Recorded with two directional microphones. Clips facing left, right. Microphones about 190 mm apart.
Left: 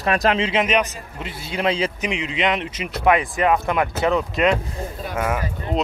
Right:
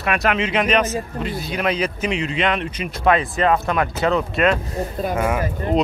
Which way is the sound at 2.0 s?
15° left (ahead or behind).